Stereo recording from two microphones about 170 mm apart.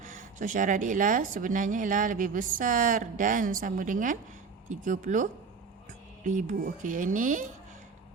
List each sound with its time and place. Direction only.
0.0 s speech: 50° right (ahead or behind)